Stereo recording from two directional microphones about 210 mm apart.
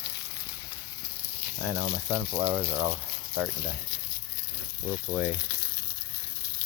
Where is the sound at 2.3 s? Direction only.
50° right (ahead or behind).